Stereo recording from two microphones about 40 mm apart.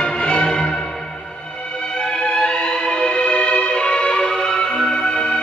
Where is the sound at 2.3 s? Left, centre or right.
Left.